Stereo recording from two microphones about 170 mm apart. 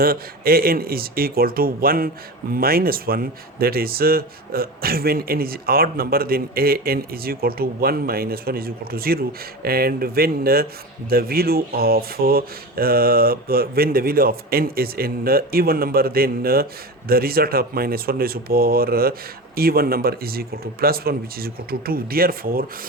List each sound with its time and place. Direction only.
0.0 s speech: 60° right (ahead or behind)